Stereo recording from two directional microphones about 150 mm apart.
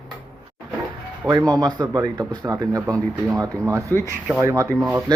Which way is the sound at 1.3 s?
25° right (ahead or behind).